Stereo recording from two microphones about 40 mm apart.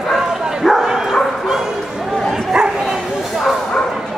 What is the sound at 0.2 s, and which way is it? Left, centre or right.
Bow-wow, centre.